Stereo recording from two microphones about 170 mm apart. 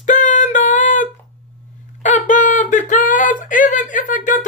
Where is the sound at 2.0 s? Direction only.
45° left (ahead or behind).